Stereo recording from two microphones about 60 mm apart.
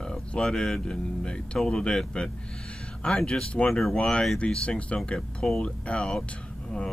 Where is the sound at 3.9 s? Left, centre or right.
Centre.